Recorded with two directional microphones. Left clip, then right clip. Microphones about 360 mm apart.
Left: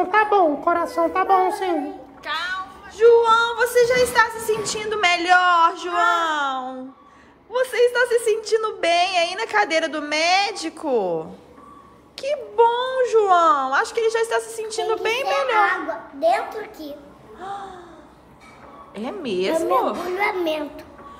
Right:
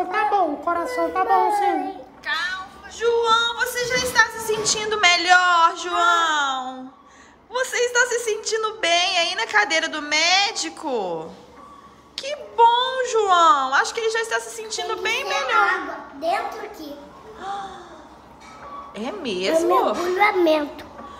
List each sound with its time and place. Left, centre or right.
0.1 s a child's voice: centre
2.2 s speech: centre
18.9 s speech: centre